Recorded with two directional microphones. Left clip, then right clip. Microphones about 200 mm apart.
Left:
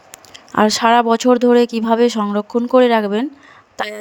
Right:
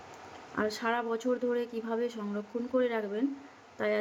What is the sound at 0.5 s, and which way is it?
Speech, 60° left (ahead or behind).